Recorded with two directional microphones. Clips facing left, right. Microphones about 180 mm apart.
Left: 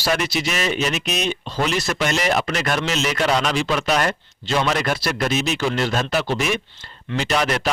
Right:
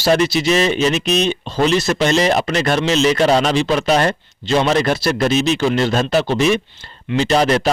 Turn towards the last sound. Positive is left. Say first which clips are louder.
# right 6 dB
turn(degrees=-30)  # may be behind; listen again after turning